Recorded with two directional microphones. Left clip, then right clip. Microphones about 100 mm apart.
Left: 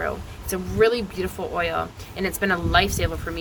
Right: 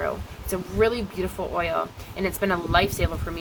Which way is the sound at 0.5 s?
20° right (ahead or behind).